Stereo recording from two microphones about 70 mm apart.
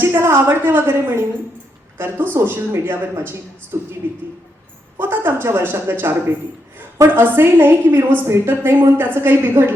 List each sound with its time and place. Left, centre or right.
0.0 s a woman's voice: right